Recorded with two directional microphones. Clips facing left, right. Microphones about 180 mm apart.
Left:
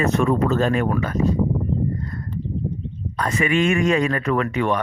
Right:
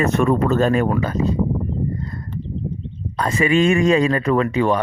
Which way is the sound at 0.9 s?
25° right (ahead or behind).